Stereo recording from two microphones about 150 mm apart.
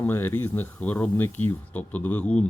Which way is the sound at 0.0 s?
15° left (ahead or behind).